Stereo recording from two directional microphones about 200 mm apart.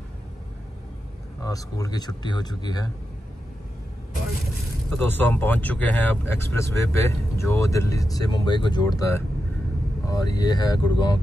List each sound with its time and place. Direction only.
1.4 s speech: 15° left (ahead or behind)
4.9 s speech: 10° left (ahead or behind)